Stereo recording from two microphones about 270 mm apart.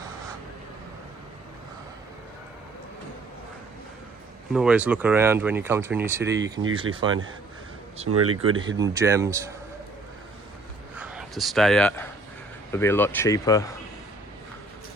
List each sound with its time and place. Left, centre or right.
4.5 s speech: centre
6.3 s speech: right
8.0 s speech: right
8.8 s speech: centre
10.9 s speech: centre